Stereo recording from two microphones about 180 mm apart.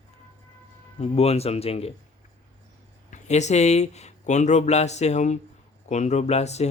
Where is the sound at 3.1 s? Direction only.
40° left (ahead or behind).